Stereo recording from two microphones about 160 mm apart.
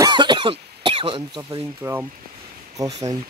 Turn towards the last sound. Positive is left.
turn(degrees=-20)  # may be behind; listen again after turning